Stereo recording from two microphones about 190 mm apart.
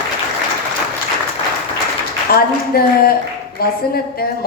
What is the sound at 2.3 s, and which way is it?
A woman's voice, 55° left (ahead or behind).